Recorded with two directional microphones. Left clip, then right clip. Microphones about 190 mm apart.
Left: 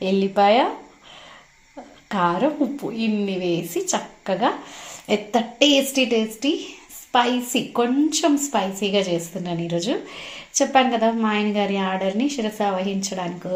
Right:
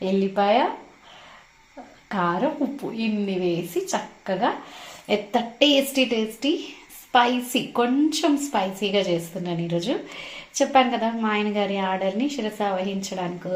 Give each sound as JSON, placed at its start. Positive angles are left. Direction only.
{"t": 0.0, "sound": "speech", "side_deg": 20}
{"t": 2.0, "sound": "a woman's voice", "side_deg": 20}